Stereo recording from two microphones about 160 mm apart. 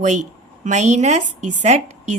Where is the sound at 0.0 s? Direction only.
50° right (ahead or behind).